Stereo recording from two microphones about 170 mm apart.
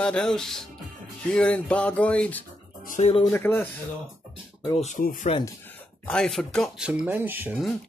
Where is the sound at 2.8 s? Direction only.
50° left (ahead or behind).